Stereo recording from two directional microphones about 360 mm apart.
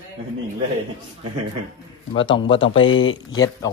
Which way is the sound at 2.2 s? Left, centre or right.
Centre.